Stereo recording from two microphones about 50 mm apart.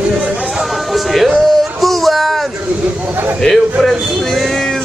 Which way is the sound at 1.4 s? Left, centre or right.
Centre.